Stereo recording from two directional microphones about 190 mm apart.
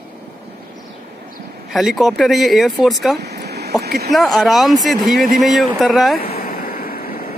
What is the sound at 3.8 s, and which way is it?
Speech, 55° right (ahead or behind).